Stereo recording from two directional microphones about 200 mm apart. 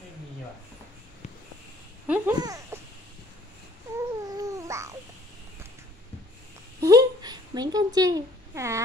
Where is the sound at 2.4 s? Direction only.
15° right (ahead or behind).